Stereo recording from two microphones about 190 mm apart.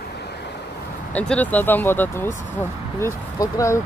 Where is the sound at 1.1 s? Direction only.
5° left (ahead or behind).